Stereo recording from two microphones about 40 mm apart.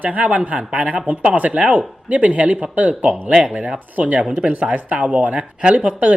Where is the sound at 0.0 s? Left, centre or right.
Right.